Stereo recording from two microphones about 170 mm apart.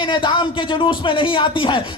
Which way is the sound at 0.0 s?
30° left (ahead or behind).